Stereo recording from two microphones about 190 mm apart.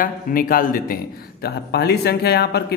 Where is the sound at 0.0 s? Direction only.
50° left (ahead or behind).